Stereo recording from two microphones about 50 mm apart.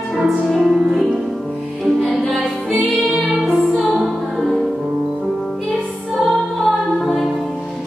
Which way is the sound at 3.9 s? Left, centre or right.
Centre.